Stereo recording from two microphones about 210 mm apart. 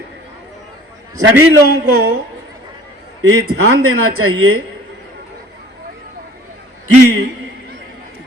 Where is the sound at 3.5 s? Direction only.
85° right.